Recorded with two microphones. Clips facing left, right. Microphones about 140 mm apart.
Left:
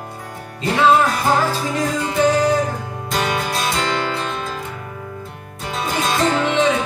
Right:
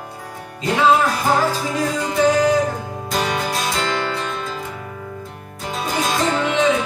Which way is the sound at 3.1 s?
Centre (ahead or behind).